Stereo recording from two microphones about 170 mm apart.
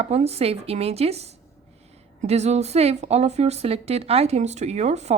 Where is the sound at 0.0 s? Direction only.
40° right (ahead or behind).